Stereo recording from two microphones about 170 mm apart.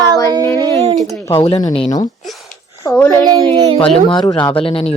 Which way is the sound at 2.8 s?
15° left (ahead or behind).